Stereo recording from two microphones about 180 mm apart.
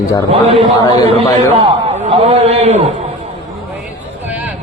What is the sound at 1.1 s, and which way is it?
A man's voice, 30° right (ahead or behind).